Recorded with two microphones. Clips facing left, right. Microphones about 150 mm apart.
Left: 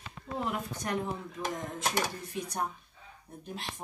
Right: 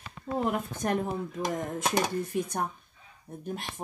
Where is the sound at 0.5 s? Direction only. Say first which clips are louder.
Right 5 dB; 50° right (ahead or behind).